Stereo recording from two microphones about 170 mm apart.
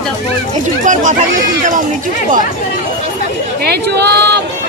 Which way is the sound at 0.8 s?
50° right (ahead or behind).